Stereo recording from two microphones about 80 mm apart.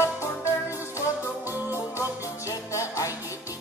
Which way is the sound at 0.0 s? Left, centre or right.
Left.